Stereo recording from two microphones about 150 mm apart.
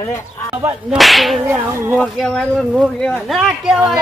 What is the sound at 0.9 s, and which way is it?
Speech, centre (ahead or behind).